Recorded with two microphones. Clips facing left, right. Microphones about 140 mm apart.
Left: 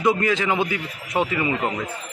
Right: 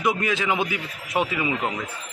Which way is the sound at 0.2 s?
10° right (ahead or behind).